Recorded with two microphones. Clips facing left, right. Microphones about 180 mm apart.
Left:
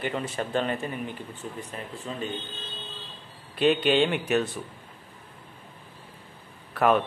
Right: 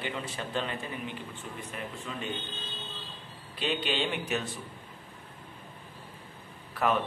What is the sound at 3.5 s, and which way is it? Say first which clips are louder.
Speech: left 10 dB; 55° left (ahead or behind).